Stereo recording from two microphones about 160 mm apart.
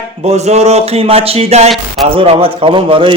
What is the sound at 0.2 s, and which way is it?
Speech, 40° right (ahead or behind).